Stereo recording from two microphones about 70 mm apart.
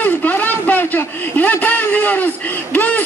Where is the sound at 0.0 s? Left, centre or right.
Left.